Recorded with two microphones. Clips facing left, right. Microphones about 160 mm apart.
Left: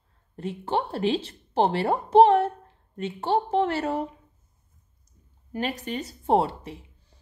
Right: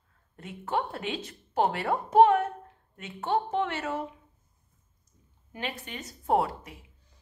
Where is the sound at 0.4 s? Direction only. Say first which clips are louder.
Left 4 dB; 30° left (ahead or behind).